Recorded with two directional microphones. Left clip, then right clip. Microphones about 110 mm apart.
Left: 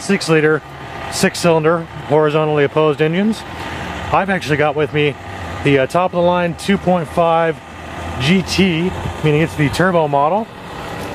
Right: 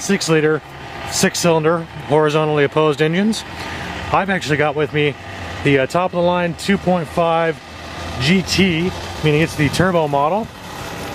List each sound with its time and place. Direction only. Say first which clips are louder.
0.0 s speech: left 2 dB; 20° right (ahead or behind)